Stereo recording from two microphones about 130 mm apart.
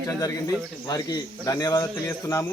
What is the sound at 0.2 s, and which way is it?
Speech, 30° left (ahead or behind).